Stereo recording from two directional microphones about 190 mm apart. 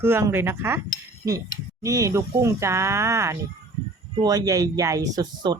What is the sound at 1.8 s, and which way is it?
Speech, 15° right (ahead or behind).